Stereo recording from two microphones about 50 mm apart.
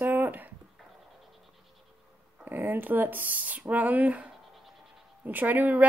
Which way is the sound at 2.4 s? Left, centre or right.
Right.